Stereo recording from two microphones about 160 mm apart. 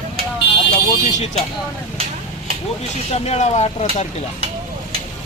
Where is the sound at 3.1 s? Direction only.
45° left (ahead or behind).